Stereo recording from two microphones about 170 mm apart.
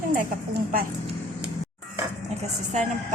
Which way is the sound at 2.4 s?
45° right (ahead or behind).